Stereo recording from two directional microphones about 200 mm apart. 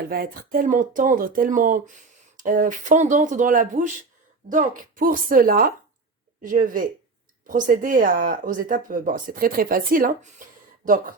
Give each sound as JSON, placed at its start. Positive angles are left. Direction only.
{"t": 0.1, "sound": "speech", "side_deg": -45}